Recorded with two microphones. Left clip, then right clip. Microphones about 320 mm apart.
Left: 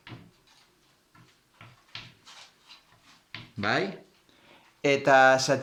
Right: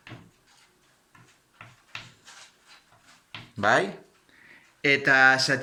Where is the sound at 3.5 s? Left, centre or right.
Centre.